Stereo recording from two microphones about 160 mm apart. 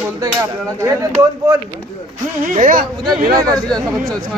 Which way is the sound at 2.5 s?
55° right (ahead or behind).